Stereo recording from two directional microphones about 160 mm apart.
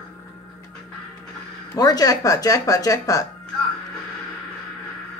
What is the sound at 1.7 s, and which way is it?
Speech, 25° left (ahead or behind).